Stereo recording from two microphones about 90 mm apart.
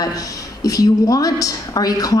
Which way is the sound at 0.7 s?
40° left (ahead or behind).